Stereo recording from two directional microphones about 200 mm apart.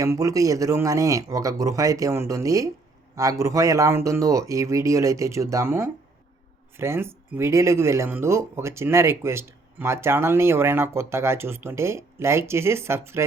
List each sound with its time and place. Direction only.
0.0 s speech: 15° right (ahead or behind)